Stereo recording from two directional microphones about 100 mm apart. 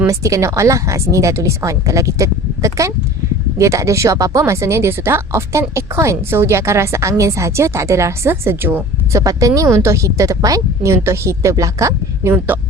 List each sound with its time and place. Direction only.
0.1 s a woman's voice: 30° right (ahead or behind)
9.1 s a woman's voice: 35° right (ahead or behind)
12.5 s speech: 20° right (ahead or behind)